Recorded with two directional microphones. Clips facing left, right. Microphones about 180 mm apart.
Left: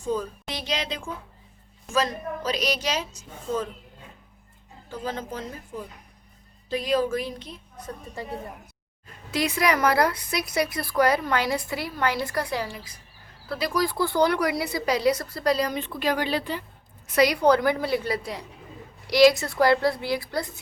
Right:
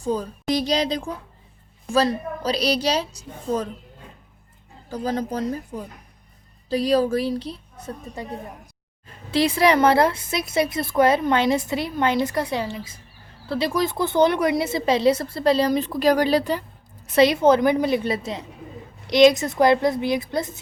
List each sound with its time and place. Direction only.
0.0 s a woman's voice: 35° right (ahead or behind)
4.9 s a woman's voice: 40° right (ahead or behind); by 8.3 s 25° right (ahead or behind)
9.3 s a woman's voice: 30° right (ahead or behind)
17.2 s a woman's voice: 25° right (ahead or behind)